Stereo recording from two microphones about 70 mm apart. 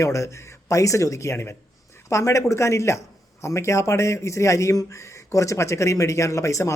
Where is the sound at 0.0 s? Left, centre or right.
Left.